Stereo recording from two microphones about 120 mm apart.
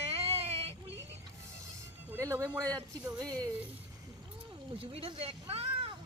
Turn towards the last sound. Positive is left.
turn(degrees=-50)  # may be behind; listen again after turning